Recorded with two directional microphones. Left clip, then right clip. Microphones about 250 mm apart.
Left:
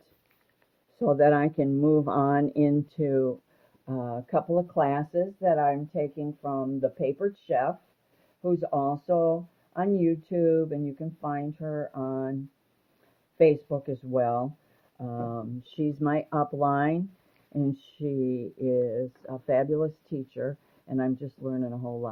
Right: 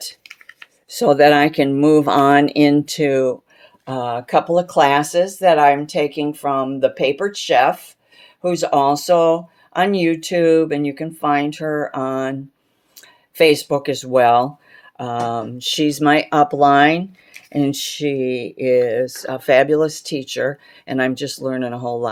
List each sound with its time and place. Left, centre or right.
0.9 s speech: centre
18.0 s speech: centre; by 22.0 s right